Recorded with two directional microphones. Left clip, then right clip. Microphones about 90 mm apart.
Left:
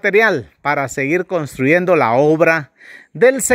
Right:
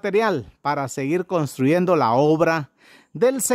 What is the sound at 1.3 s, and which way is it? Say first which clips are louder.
Speech: left 4 dB; 20° right (ahead or behind).